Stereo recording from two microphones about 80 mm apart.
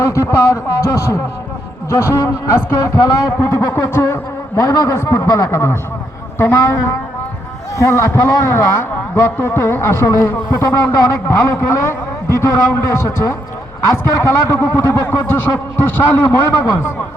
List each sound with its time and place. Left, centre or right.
0.0 s a man's voice: left
3.3 s a man's voice: left
4.5 s a man's voice: left